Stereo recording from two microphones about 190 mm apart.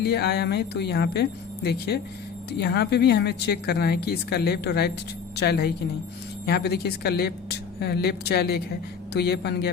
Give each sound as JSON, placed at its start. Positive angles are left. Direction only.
{"t": 0.0, "sound": "a woman's voice", "side_deg": 60}